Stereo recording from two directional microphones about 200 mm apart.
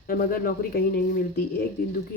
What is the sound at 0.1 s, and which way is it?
Speech, 45° left (ahead or behind).